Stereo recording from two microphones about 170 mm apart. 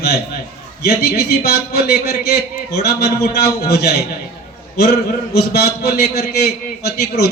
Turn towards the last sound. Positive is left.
turn(degrees=70)  # may be behind; listen again after turning